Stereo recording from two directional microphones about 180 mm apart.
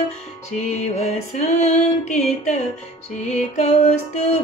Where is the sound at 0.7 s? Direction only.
40° left (ahead or behind).